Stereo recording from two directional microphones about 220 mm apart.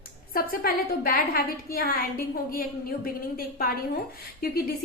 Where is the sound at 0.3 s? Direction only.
40° left (ahead or behind).